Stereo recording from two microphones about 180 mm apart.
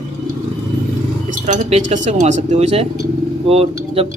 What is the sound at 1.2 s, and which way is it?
A man's voice, 45° right (ahead or behind).